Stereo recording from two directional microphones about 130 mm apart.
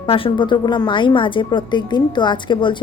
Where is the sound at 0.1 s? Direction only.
40° left (ahead or behind).